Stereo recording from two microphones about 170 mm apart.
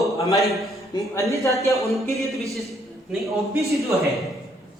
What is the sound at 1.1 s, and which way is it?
Speech, 20° left (ahead or behind).